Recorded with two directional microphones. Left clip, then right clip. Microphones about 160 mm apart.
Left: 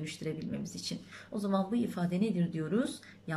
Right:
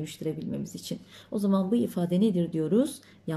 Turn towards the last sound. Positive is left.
turn(degrees=-30)  # may be behind; listen again after turning